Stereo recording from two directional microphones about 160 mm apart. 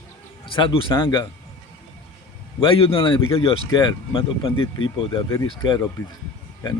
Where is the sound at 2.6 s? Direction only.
35° left (ahead or behind).